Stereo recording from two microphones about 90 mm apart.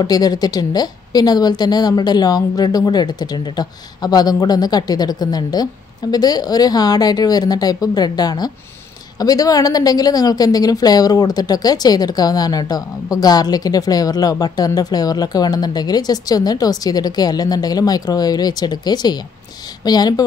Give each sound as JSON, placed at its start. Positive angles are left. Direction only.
{"t": 0.0, "sound": "speech", "side_deg": 45}